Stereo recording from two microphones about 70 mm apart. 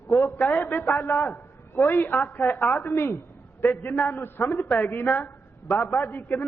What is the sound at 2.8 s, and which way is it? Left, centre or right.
A man's voice, left.